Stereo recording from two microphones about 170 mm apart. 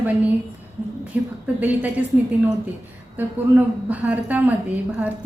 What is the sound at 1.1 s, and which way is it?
Speech, 10° right (ahead or behind).